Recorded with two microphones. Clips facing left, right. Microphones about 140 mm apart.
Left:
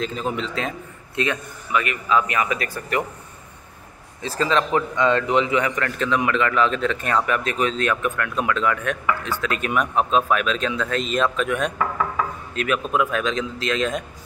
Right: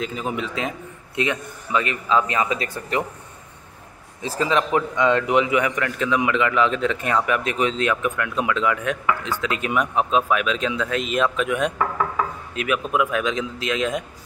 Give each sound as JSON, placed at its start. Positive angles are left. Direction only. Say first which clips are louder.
{"t": 0.0, "sound": "a man's voice", "louder": "left 1 dB", "side_deg": -10}
{"t": 4.2, "sound": "a man's voice", "louder": "even", "side_deg": -15}